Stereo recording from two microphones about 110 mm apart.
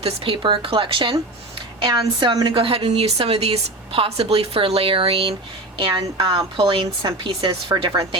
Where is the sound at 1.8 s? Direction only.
40° right (ahead or behind); by 5.3 s 60° right (ahead or behind).